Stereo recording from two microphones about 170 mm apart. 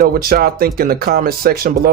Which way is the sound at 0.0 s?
60° right (ahead or behind).